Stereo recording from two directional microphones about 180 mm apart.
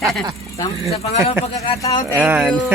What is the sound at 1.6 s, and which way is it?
Speech, 20° left (ahead or behind).